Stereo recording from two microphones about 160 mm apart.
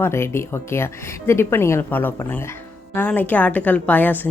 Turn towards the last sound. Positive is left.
turn(degrees=10)  # may be behind; listen again after turning